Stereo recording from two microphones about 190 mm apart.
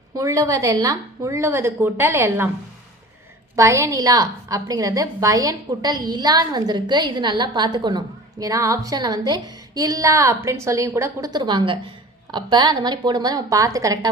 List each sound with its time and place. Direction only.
0.2 s a woman's voice: 15° right (ahead or behind)
3.5 s a woman's voice: 15° right (ahead or behind)